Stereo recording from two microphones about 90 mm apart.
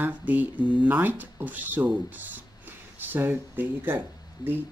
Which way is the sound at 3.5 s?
20° right (ahead or behind).